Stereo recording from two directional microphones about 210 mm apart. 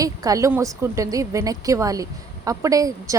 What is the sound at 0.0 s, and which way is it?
Speech, 15° right (ahead or behind).